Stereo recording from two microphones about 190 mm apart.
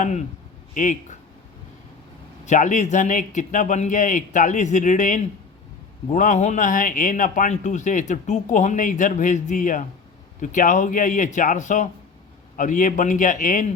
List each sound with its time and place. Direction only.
0.0 s speech: 40° left (ahead or behind)
2.5 s speech: 40° left (ahead or behind)